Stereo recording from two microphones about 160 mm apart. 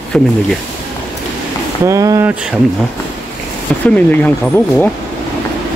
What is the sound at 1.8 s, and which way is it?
Speech, 20° right (ahead or behind).